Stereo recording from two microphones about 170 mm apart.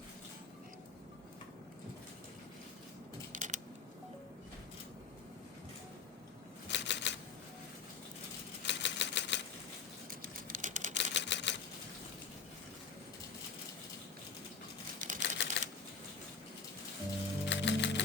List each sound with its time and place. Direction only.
3.3 s a sound: 45° right (ahead or behind)
6.7 s typewriter: 90° left
8.6 s typewriter: 90° left
10.1 s typewriter: 45° right (ahead or behind)
10.9 s camera: 90° left
14.9 s typewriter: 45° right (ahead or behind)
15.2 s typewriter: 85° left
17.4 s music: 90° left